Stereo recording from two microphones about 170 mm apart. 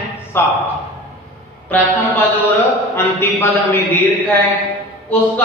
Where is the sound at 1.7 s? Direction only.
10° left (ahead or behind).